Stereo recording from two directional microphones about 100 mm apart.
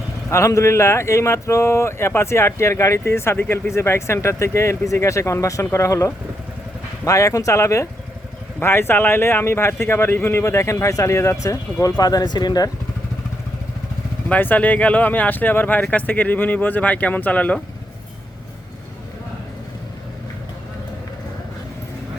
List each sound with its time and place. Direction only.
0.3 s a man's voice: 30° left (ahead or behind)
14.3 s speech: 15° left (ahead or behind)